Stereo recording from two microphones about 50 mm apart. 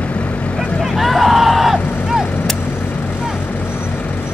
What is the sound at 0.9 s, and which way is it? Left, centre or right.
Artillery fire, centre.